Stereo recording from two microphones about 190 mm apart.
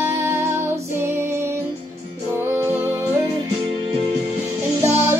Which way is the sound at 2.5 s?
15° right (ahead or behind).